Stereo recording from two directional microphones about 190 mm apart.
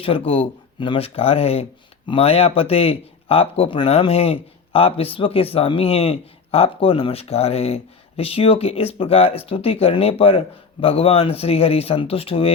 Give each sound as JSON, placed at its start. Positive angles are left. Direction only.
{"t": 0.0, "sound": "speech", "side_deg": 30}